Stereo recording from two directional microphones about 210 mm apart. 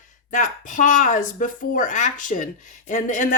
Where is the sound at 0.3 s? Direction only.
35° left (ahead or behind).